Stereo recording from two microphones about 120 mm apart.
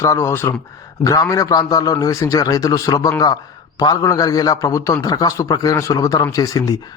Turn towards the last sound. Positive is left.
turn(degrees=30)  # may be behind; listen again after turning